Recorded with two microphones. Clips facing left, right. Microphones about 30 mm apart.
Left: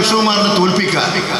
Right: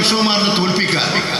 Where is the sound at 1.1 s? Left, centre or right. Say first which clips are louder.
Left 1 dB; centre.